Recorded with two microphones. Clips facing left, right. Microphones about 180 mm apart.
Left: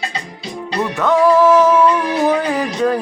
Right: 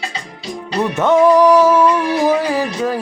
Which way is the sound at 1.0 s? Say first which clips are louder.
Right 2 dB; 20° right (ahead or behind).